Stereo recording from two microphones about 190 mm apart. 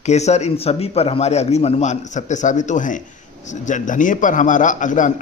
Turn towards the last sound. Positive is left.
turn(degrees=40)  # may be behind; listen again after turning